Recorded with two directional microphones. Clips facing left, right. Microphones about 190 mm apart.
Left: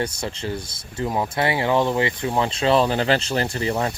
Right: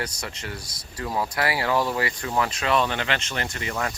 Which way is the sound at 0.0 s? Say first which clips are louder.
Left 6 dB; 30° left (ahead or behind).